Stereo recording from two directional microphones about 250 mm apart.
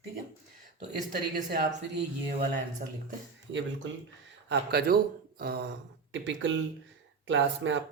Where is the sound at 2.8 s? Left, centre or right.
Right.